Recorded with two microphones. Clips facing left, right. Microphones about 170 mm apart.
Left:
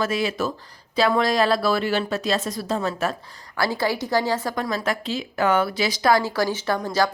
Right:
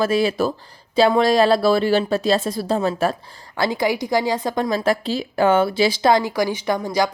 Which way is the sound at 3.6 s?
15° right (ahead or behind).